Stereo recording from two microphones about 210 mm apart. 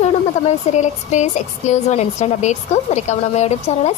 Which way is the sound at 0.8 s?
35° left (ahead or behind).